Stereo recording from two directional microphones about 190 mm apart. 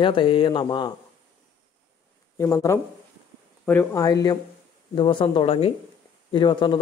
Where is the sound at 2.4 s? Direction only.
15° left (ahead or behind).